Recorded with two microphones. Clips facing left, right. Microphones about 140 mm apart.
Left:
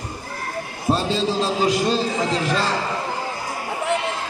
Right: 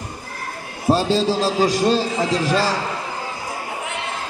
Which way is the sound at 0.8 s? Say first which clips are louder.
Right 4 dB; 40° right (ahead or behind).